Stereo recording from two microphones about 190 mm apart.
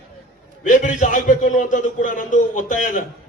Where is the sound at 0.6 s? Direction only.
40° left (ahead or behind).